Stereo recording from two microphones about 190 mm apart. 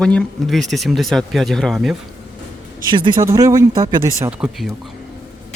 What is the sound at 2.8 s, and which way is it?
Speech, 25° right (ahead or behind).